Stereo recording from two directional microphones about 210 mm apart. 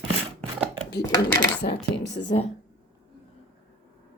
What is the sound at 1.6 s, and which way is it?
Speech, 50° left (ahead or behind).